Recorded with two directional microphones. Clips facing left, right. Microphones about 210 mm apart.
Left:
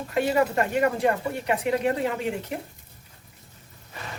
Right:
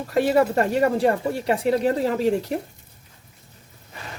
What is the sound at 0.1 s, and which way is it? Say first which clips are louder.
A woman's voice: right 4 dB; 35° right (ahead or behind).